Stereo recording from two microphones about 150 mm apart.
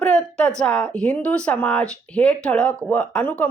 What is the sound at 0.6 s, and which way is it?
A woman's voice, 5° left (ahead or behind).